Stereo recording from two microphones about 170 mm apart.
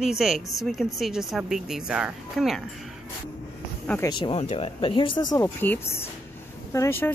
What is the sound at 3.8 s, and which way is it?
Speech, 10° left (ahead or behind).